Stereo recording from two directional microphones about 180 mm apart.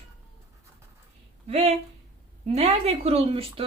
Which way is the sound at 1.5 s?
35° right (ahead or behind).